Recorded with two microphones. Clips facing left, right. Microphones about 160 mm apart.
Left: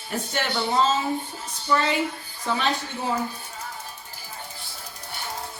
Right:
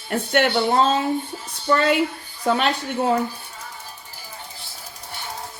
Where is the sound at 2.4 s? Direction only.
65° right (ahead or behind).